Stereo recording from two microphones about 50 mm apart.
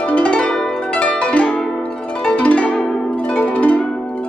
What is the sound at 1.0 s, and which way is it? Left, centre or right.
Zither, left.